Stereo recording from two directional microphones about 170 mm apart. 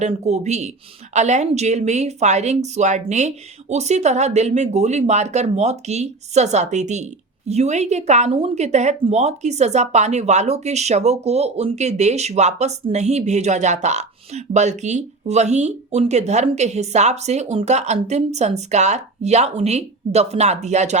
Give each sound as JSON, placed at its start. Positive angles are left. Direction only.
{"t": 0.0, "sound": "speech", "side_deg": -40}